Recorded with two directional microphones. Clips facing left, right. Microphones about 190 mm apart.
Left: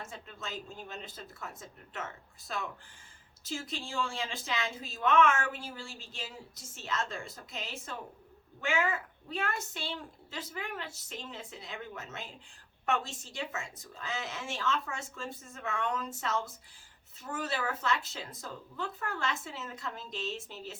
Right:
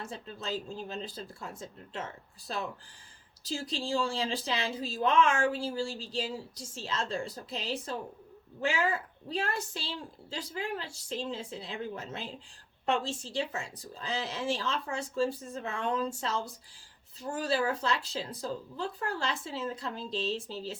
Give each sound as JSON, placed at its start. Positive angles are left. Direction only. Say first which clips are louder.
{"t": 0.0, "sound": "a woman's voice", "louder": "right 4 dB", "side_deg": -35}